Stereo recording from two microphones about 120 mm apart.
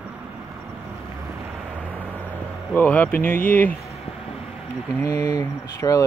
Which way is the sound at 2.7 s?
15° left (ahead or behind).